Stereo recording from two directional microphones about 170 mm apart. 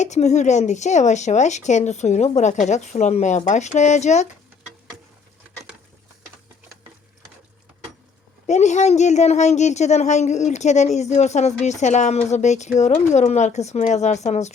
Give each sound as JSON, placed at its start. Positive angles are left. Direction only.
{"t": 0.0, "sound": "speech", "side_deg": 40}
{"t": 8.4, "sound": "speech", "side_deg": 45}